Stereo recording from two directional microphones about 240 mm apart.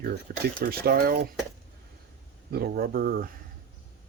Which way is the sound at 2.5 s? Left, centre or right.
Right.